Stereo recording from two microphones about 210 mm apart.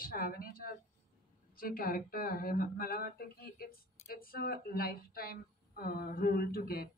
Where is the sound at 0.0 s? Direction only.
45° left (ahead or behind).